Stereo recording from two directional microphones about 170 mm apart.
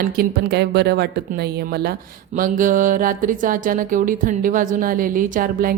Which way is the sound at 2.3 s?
50° right (ahead or behind).